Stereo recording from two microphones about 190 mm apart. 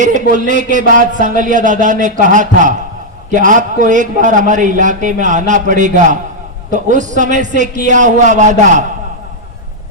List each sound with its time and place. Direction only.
0.0 s a man's voice: 40° right (ahead or behind)